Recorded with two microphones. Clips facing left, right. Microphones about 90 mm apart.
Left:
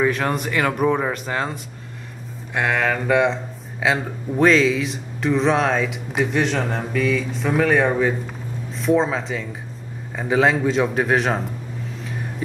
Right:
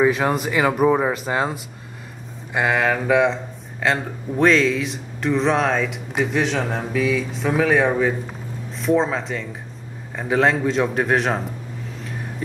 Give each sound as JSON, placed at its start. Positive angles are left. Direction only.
{"t": 0.0, "sound": "a man's voice", "side_deg": -5}